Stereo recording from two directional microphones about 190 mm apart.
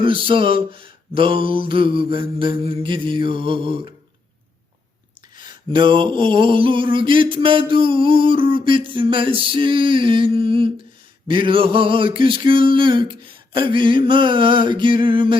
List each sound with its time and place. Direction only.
0.0 s mantra: 25° right (ahead or behind)
5.4 s mantra: 25° right (ahead or behind)